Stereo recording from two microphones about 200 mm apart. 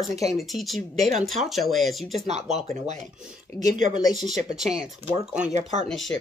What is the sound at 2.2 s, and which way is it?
Speech, 35° right (ahead or behind).